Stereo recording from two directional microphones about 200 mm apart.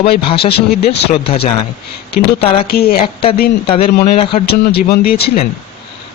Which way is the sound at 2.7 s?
50° left (ahead or behind).